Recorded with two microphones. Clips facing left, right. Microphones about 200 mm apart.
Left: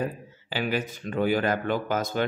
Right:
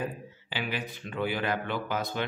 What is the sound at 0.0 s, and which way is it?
Speech, 45° left (ahead or behind).